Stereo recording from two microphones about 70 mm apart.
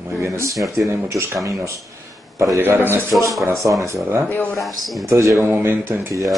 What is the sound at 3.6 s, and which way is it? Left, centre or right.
Speech, right.